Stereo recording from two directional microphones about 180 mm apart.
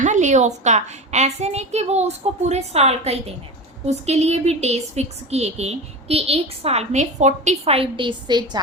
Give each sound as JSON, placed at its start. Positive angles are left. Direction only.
{"t": 0.0, "sound": "speech", "side_deg": -40}